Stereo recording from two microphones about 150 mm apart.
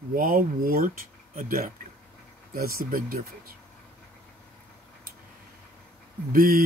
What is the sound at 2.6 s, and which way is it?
Speech, 85° right.